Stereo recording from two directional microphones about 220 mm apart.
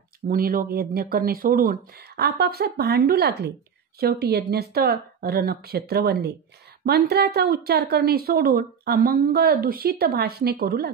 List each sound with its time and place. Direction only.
0.3 s speech: 40° right (ahead or behind)